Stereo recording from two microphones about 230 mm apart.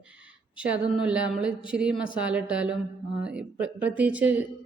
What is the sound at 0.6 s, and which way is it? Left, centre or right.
Speech, centre.